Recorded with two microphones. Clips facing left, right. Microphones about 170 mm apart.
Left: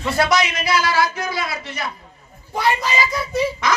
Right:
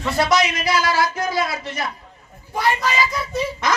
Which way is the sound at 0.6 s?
45° right (ahead or behind).